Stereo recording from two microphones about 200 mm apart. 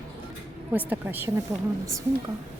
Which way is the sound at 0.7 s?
10° right (ahead or behind).